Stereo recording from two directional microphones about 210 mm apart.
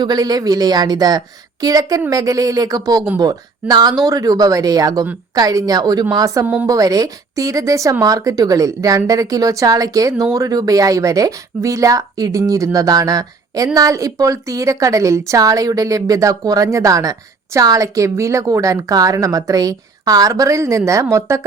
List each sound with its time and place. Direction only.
0.0 s a woman's voice: 20° right (ahead or behind)